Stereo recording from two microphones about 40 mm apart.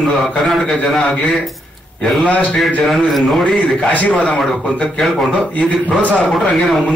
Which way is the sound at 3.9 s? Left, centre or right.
Left.